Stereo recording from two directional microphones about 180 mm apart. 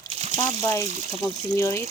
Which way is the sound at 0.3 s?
20° left (ahead or behind).